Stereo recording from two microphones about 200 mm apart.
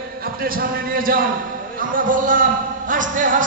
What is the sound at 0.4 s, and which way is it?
A man's voice, 45° right (ahead or behind).